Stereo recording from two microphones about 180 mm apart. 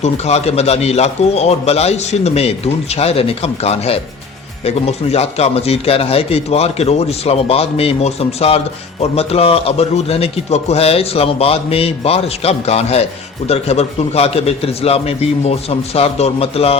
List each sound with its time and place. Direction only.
0.0 s a man's voice: 35° left (ahead or behind)